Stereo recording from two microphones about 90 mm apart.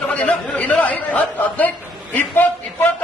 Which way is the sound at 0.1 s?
15° left (ahead or behind).